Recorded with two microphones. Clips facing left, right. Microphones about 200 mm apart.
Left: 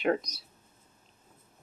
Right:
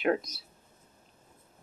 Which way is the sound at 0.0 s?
Centre (ahead or behind).